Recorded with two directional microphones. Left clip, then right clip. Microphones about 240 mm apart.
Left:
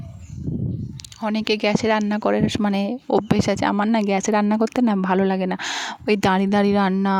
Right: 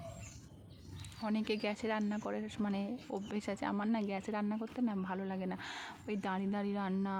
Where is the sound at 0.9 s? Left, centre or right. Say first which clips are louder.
Left 13 dB; left.